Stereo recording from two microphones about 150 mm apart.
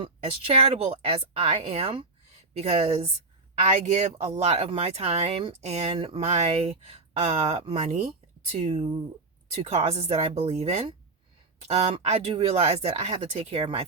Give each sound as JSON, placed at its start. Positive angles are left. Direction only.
{"t": 0.0, "sound": "speech", "side_deg": -40}
{"t": 4.2, "sound": "speech", "side_deg": -50}